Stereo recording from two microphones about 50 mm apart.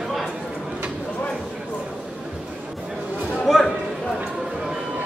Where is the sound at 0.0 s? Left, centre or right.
Centre.